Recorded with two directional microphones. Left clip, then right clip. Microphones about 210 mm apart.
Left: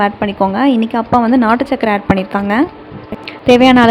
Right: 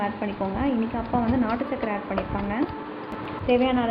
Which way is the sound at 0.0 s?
55° left (ahead or behind).